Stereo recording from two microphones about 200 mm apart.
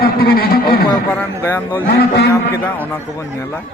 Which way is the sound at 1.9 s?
55° left (ahead or behind).